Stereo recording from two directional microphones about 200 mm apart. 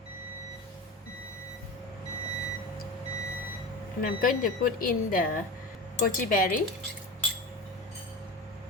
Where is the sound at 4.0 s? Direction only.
45° left (ahead or behind).